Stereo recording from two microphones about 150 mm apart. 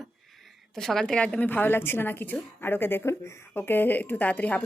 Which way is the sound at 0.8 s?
5° left (ahead or behind).